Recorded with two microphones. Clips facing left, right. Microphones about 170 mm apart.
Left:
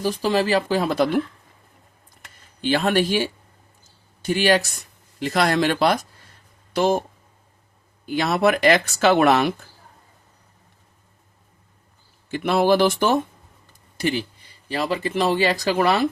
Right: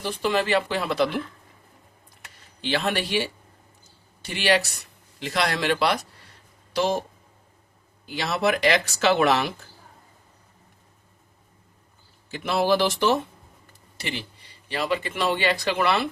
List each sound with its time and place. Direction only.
0.0 s speech: 35° left (ahead or behind)
2.6 s speech: 45° left (ahead or behind)
4.2 s speech: 45° left (ahead or behind)
8.0 s speech: 50° left (ahead or behind)
12.3 s speech: 55° left (ahead or behind)
14.7 s speech: 40° left (ahead or behind)